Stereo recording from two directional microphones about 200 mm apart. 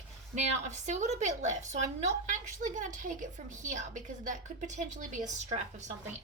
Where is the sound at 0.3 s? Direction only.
35° right (ahead or behind).